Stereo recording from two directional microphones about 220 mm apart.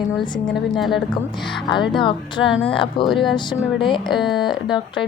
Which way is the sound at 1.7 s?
20° left (ahead or behind).